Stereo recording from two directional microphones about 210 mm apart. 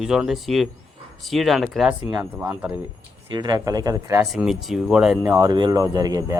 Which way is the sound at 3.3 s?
20° right (ahead or behind).